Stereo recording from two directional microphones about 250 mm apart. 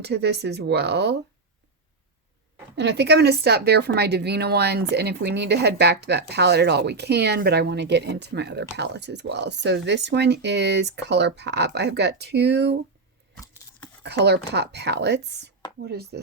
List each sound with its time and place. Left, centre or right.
0.0 s speech: right
2.7 s speech: right
13.4 s a sound: centre
14.0 s speech: right